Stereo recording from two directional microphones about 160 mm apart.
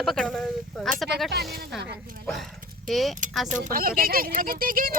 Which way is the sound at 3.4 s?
55° right (ahead or behind).